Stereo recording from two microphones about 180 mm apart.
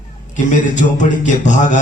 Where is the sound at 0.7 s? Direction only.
45° left (ahead or behind).